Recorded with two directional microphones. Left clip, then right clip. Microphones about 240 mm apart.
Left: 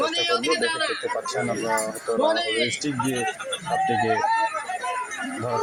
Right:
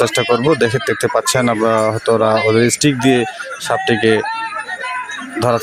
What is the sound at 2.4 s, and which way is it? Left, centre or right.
Speech, right.